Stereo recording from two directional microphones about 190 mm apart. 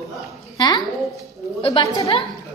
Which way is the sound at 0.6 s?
20° left (ahead or behind).